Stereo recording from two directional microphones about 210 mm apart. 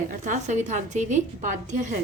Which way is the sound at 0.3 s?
35° right (ahead or behind).